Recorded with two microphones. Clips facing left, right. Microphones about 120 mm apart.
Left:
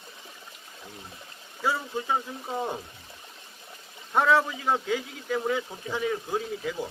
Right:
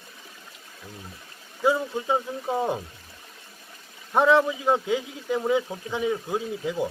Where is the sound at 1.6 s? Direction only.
20° right (ahead or behind).